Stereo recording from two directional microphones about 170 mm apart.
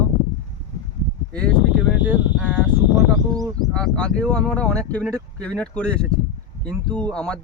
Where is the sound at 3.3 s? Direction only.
20° right (ahead or behind).